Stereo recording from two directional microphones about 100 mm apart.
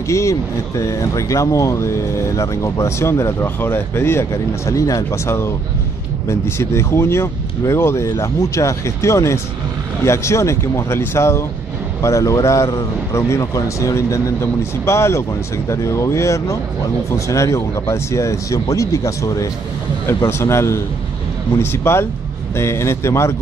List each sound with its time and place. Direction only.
0.1 s speech: 30° left (ahead or behind)